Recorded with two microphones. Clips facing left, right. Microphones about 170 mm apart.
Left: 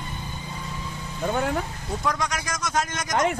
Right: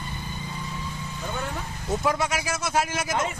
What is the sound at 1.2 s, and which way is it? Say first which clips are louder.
Speech: left 8 dB; 60° left (ahead or behind).